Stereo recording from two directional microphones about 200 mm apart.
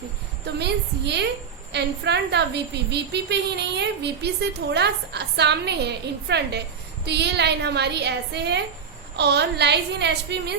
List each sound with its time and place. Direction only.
0.4 s a woman's voice: 55° right (ahead or behind)